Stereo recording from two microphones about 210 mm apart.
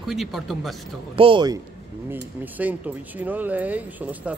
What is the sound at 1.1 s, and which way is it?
Speech, 25° right (ahead or behind).